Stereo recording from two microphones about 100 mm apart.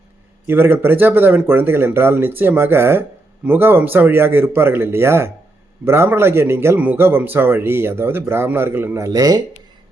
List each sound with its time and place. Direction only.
0.4 s speech: 20° right (ahead or behind); by 9.4 s 35° right (ahead or behind)